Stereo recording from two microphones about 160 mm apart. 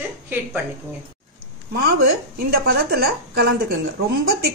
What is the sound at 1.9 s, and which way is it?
A woman's voice, 80° right.